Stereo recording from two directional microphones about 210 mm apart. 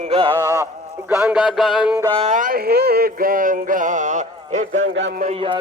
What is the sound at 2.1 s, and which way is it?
Music, 35° right (ahead or behind).